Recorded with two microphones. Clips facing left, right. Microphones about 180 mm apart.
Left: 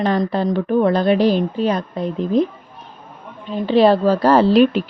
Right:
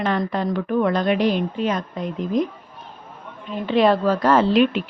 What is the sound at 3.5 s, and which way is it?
Speech, 30° left (ahead or behind).